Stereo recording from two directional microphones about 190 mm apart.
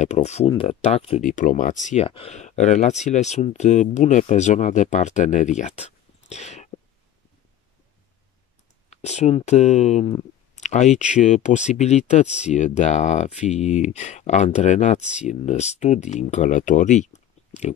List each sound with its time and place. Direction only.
0.0 s speech: 35° left (ahead or behind)
8.9 s speech: 35° left (ahead or behind)